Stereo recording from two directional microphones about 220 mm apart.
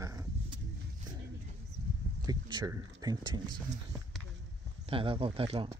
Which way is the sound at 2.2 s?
15° right (ahead or behind).